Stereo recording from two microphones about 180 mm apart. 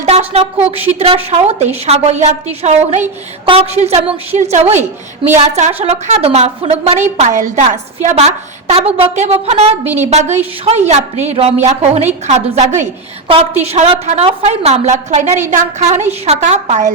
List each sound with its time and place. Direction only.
0.0 s a woman's voice: 35° right (ahead or behind)